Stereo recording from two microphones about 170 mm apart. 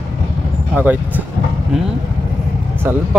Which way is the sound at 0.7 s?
10° right (ahead or behind).